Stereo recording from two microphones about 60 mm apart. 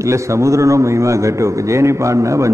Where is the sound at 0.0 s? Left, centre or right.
Right.